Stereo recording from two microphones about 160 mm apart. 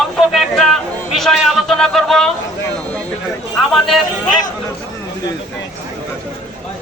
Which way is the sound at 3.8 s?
25° left (ahead or behind).